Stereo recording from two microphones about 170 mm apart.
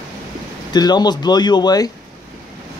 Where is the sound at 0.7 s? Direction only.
25° left (ahead or behind).